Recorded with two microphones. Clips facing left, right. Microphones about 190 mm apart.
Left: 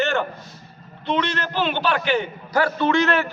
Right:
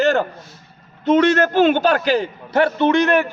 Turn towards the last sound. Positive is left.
turn(degrees=-15)  # may be behind; listen again after turning